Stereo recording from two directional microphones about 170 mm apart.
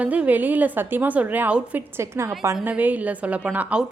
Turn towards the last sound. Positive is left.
turn(degrees=-10)  # may be behind; listen again after turning